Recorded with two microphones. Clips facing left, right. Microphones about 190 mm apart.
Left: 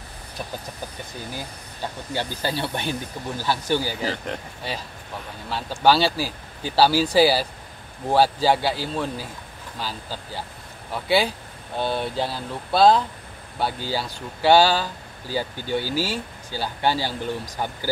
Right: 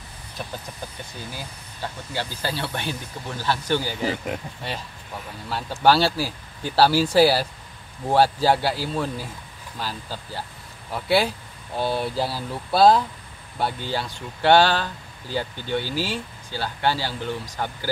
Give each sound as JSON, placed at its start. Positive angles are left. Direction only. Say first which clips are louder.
{"t": 2.1, "sound": "speech", "louder": "left 2 dB", "side_deg": 15}
{"t": 4.1, "sound": "speech", "louder": "right 2 dB", "side_deg": -5}